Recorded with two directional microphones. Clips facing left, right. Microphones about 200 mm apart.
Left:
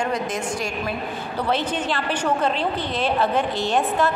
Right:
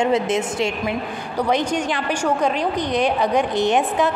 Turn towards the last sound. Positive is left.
turn(degrees=-20)  # may be behind; listen again after turning